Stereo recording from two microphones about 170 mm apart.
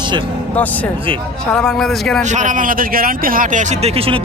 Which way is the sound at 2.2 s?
45° right (ahead or behind).